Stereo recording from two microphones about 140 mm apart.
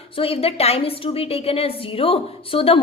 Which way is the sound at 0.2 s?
45° left (ahead or behind).